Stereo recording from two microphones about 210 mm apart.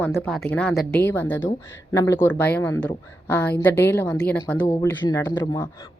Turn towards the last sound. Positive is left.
turn(degrees=15)  # may be behind; listen again after turning